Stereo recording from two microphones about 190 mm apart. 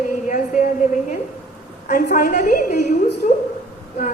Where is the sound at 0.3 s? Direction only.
45° left (ahead or behind).